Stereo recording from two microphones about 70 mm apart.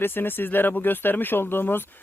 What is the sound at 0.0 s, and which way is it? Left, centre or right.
Speech, left.